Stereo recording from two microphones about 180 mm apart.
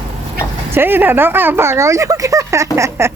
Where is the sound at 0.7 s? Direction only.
10° right (ahead or behind).